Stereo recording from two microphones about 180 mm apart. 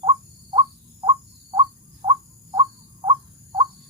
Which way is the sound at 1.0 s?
30° right (ahead or behind).